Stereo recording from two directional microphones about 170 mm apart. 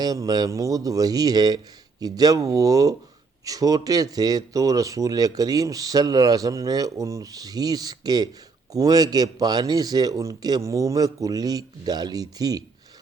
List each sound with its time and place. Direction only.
0.0 s speech: 20° right (ahead or behind)